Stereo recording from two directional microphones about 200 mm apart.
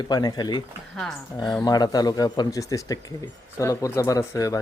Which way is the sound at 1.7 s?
20° left (ahead or behind).